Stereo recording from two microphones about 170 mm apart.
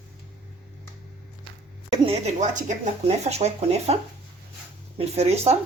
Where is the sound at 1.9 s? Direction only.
35° right (ahead or behind).